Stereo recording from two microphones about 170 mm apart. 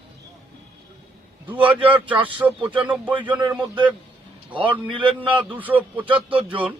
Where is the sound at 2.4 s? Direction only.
10° right (ahead or behind).